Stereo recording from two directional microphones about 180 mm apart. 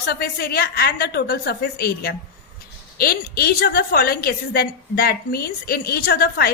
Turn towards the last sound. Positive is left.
turn(degrees=55)  # may be behind; listen again after turning